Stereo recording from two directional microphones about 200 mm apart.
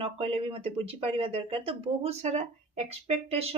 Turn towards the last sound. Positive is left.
turn(degrees=-30)  # may be behind; listen again after turning